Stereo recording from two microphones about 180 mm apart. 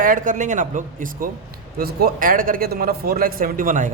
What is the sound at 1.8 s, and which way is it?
A man's voice, 60° right (ahead or behind).